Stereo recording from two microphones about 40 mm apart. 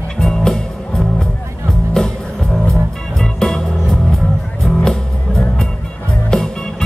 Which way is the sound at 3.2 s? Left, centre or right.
Centre.